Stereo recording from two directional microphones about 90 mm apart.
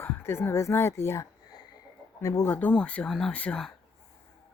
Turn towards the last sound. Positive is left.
turn(degrees=15)  # may be behind; listen again after turning